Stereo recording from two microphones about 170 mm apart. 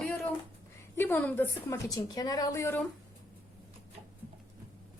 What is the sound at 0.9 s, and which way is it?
A woman's voice, 10° left (ahead or behind).